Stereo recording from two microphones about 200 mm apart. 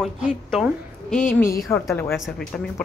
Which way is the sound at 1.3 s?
15° left (ahead or behind).